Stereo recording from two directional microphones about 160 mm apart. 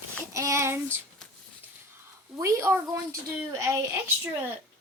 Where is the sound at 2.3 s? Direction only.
15° right (ahead or behind).